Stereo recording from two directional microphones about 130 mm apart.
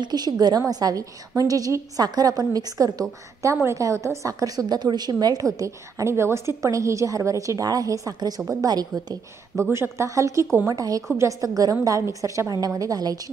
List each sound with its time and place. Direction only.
0.0 s a woman's voice: 30° right (ahead or behind)